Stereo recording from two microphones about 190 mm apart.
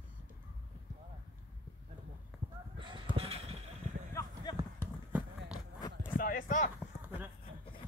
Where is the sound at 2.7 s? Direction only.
25° right (ahead or behind).